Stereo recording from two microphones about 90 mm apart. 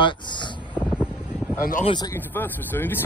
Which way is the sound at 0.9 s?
10° right (ahead or behind).